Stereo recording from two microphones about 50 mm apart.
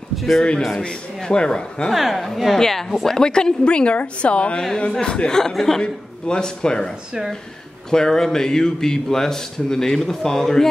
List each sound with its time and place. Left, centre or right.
0.1 s a sound: centre
0.7 s a man's voice: centre
1.9 s a woman's voice: centre
7.1 s speech: centre
7.9 s a man's voice: centre